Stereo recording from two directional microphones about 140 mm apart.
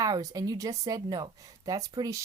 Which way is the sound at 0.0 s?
25° right (ahead or behind).